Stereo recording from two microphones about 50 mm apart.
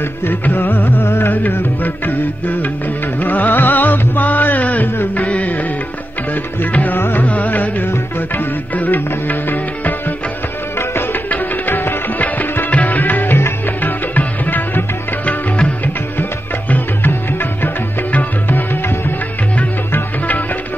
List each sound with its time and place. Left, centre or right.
0.3 s music: left
1.5 s music: left
6.6 s music: left
7.0 s music: left
7.2 s music: left
11.2 s music: left
16.7 s music: left